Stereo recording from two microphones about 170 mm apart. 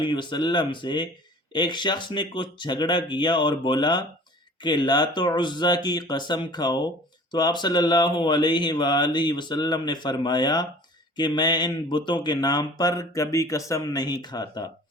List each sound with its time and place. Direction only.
0.0 s speech: 25° left (ahead or behind)